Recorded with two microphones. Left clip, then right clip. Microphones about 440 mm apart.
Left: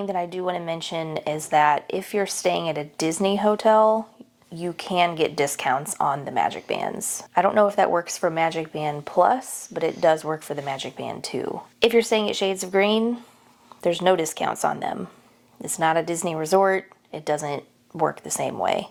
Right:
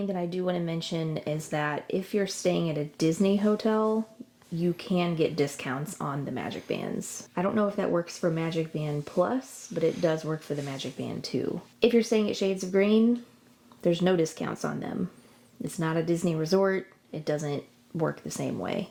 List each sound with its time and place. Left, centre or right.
0.0 s speech: left